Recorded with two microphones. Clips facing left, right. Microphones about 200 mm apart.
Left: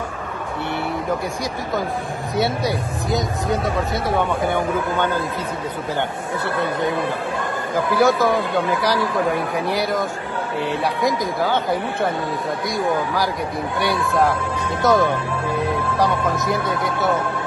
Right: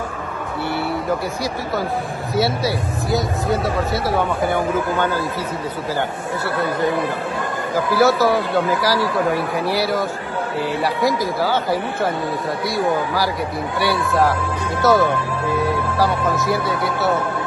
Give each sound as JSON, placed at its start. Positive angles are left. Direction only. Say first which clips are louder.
{"t": 2.3, "sound": "speech", "louder": "right 1 dB", "side_deg": 0}
{"t": 7.9, "sound": "speech", "louder": "right 1 dB", "side_deg": -5}